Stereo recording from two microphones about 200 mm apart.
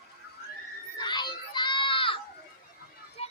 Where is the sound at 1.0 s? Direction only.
20° left (ahead or behind).